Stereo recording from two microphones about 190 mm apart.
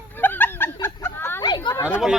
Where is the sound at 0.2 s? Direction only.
10° left (ahead or behind).